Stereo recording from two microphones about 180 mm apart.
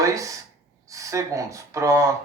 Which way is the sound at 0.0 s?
20° right (ahead or behind).